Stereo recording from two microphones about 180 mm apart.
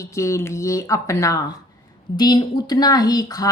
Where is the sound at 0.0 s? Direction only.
15° left (ahead or behind).